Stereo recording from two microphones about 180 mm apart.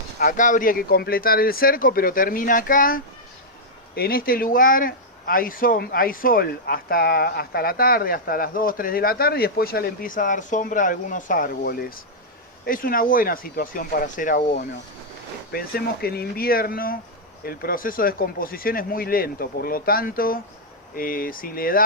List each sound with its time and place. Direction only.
0.2 s speech: 45° left (ahead or behind)
15.5 s speech: 60° left (ahead or behind)